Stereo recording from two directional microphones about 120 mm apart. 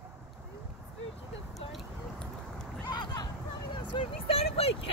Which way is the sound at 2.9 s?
35° left (ahead or behind).